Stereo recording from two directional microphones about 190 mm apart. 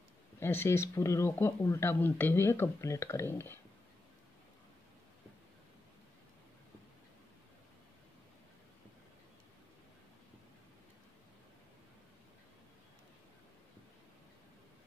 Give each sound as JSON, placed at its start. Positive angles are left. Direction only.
{"t": 0.4, "sound": "speech", "side_deg": 10}